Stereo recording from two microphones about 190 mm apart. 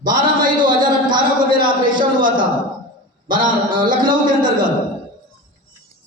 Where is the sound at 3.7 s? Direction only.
25° right (ahead or behind).